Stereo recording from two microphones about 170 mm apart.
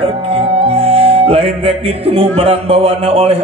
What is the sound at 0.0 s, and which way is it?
Music, 35° right (ahead or behind).